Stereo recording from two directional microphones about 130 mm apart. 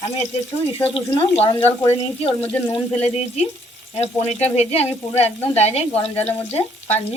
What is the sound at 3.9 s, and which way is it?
Speech, 55° left (ahead or behind).